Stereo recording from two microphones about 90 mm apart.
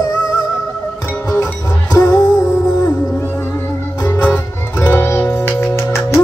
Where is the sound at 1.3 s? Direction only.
40° left (ahead or behind).